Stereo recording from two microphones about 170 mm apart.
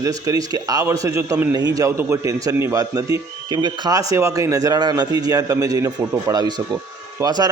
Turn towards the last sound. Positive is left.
turn(degrees=-25)  # may be behind; listen again after turning